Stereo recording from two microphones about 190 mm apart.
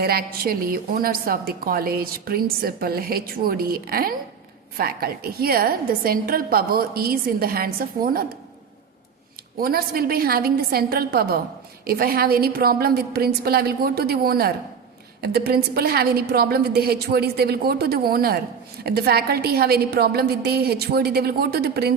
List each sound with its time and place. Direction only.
0.0 s a woman's voice: 55° right (ahead or behind)
9.6 s a woman's voice: 50° right (ahead or behind)